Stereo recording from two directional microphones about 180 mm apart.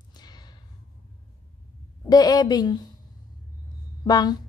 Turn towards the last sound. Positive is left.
turn(degrees=20)  # may be behind; listen again after turning